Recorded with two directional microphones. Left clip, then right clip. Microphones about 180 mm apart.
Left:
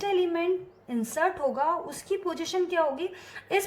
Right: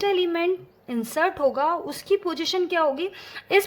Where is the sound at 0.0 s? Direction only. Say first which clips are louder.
Right 4 dB; 30° right (ahead or behind).